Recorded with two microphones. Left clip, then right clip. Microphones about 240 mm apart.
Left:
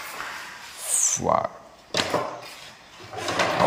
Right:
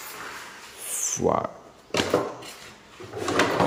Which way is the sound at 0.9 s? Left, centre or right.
Centre.